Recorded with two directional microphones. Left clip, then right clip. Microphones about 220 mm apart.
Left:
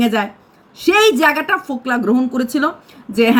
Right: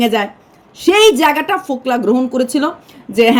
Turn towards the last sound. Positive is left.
turn(degrees=-5)  # may be behind; listen again after turning